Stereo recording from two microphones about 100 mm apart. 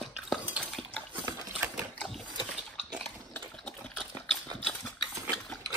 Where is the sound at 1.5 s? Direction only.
15° right (ahead or behind).